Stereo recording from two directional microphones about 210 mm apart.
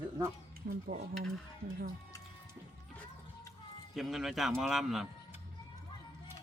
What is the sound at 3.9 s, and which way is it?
Speech, centre (ahead or behind).